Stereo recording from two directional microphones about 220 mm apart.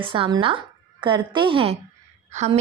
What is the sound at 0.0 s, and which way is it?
A woman's voice, 25° right (ahead or behind).